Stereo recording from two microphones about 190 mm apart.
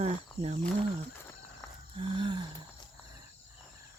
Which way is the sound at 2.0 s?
25° right (ahead or behind).